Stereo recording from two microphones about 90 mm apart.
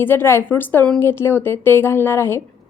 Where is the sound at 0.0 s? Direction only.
25° left (ahead or behind).